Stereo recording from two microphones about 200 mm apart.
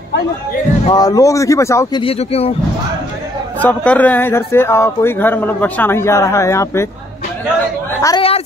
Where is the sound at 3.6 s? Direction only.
10° left (ahead or behind).